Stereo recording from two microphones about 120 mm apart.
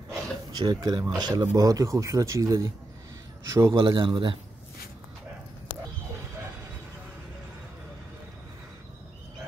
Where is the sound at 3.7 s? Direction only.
40° right (ahead or behind).